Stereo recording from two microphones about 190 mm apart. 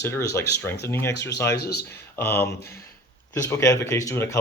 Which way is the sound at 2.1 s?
10° left (ahead or behind).